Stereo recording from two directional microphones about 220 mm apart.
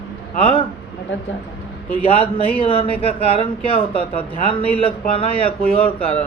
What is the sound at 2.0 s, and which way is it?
Speech, 25° left (ahead or behind).